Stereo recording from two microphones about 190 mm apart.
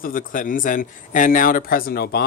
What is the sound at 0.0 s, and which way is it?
Speech, 45° left (ahead or behind).